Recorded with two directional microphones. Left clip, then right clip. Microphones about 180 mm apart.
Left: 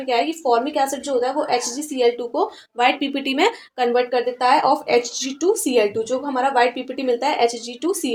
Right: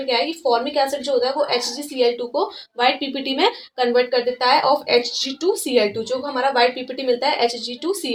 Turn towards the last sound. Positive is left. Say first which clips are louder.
# left 1 dB
turn(degrees=45)  # may be behind; listen again after turning